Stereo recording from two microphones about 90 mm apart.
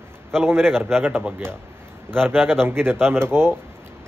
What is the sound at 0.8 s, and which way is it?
A man's voice, 25° right (ahead or behind).